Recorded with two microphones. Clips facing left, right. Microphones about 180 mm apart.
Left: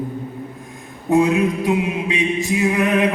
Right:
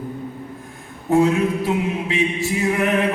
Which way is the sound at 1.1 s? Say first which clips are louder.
Left 1 dB; 15° left (ahead or behind).